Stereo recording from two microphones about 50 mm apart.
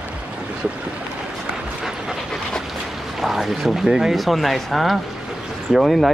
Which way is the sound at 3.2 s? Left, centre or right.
Centre.